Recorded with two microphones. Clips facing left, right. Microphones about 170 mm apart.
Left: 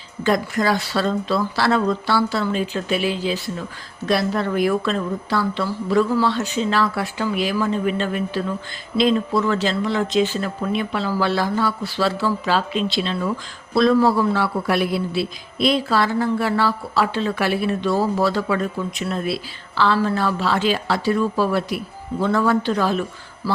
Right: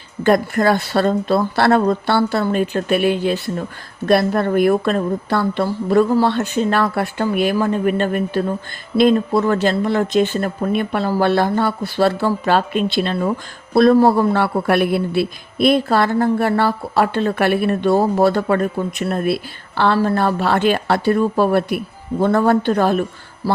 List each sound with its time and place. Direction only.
0.2 s speech: 55° right (ahead or behind)